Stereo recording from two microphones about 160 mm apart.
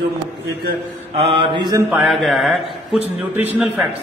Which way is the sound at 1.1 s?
40° right (ahead or behind).